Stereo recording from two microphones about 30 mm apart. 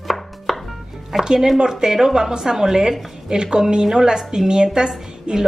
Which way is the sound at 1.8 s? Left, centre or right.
Centre.